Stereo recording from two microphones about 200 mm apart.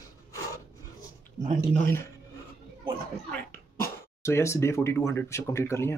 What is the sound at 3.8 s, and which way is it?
Speech, 15° left (ahead or behind).